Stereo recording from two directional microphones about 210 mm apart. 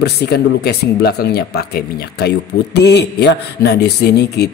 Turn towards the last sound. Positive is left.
turn(degrees=50)  # may be behind; listen again after turning